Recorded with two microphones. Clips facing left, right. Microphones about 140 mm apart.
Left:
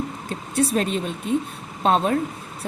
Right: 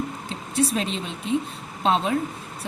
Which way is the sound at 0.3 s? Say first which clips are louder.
Left 2 dB; 50° left (ahead or behind).